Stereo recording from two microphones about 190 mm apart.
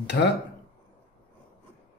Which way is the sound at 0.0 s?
65° left (ahead or behind).